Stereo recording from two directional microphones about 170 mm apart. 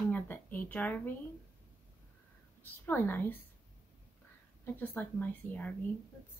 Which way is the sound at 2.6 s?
10° left (ahead or behind).